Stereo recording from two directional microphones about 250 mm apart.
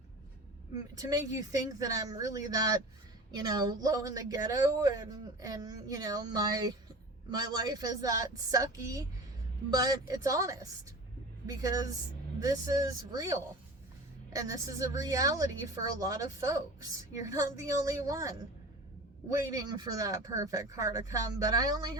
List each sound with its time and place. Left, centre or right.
0.9 s a woman's voice: centre